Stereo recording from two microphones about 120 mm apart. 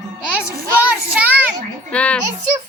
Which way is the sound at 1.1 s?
10° right (ahead or behind).